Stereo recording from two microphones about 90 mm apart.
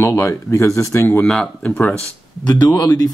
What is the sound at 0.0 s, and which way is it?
Speech, 30° left (ahead or behind).